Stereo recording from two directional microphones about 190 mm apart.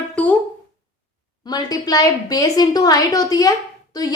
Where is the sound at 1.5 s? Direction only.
20° left (ahead or behind).